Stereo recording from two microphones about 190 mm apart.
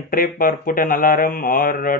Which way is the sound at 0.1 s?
50° left (ahead or behind).